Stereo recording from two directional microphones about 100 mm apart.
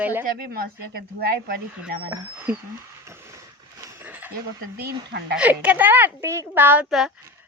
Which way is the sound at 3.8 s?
30° right (ahead or behind).